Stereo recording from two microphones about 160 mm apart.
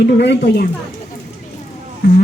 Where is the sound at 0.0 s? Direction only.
90° left.